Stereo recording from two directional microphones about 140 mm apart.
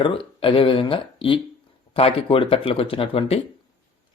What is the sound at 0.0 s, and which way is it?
Speech, 40° left (ahead or behind).